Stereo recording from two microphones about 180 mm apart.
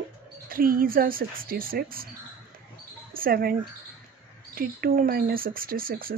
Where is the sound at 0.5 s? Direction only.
55° right (ahead or behind).